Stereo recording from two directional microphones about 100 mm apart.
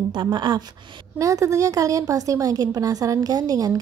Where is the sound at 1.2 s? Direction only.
35° right (ahead or behind).